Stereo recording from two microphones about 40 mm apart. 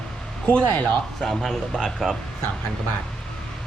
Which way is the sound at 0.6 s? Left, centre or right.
Left.